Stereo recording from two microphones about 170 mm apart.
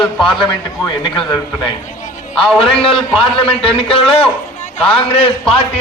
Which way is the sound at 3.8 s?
35° left (ahead or behind).